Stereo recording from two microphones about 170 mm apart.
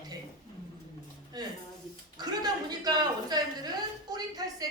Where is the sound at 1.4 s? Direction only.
25° right (ahead or behind).